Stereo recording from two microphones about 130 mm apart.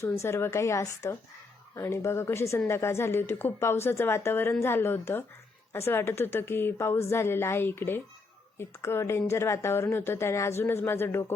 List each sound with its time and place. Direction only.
0.0 s a woman's voice: 20° left (ahead or behind)